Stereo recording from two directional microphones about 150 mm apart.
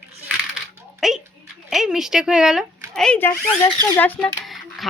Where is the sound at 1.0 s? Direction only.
5° right (ahead or behind).